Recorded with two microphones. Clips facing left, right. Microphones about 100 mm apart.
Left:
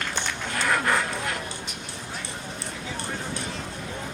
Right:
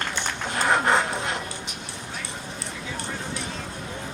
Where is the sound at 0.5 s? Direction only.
30° right (ahead or behind).